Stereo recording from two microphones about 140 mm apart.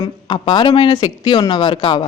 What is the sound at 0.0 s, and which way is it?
Speech, 35° left (ahead or behind).